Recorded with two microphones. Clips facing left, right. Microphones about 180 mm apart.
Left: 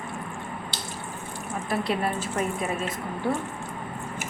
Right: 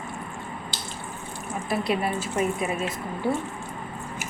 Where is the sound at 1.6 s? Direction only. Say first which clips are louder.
Right 1 dB; 10° right (ahead or behind).